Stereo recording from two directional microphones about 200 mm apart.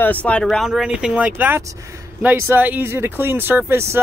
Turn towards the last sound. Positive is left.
turn(degrees=-10)  # may be behind; listen again after turning